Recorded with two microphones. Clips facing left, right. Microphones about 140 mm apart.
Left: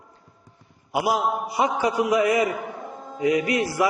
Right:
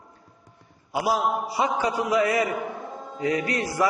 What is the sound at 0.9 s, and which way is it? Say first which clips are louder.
A man's voice: left 1 dB; 15° left (ahead or behind).